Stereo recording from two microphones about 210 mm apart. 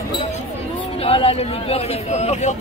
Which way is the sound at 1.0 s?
25° left (ahead or behind).